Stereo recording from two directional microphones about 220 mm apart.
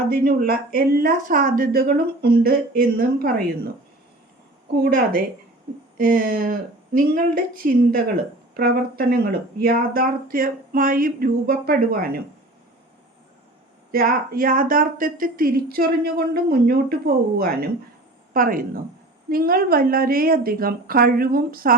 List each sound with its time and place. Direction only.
0.1 s a woman's voice: 45° right (ahead or behind)
4.8 s speech: 40° right (ahead or behind)
13.9 s a woman's voice: 40° right (ahead or behind)